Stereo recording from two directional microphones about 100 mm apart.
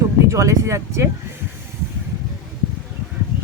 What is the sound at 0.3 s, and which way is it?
Speech, 30° right (ahead or behind).